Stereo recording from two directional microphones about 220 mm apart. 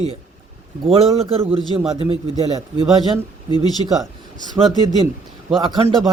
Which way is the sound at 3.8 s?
25° right (ahead or behind).